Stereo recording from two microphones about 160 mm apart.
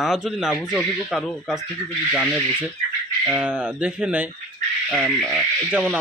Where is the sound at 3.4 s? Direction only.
10° right (ahead or behind).